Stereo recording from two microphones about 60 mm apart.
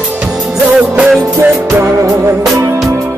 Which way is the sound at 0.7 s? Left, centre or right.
Centre.